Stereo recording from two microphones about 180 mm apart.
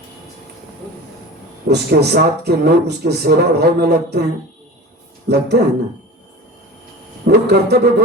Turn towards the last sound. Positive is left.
turn(degrees=-65)  # may be behind; listen again after turning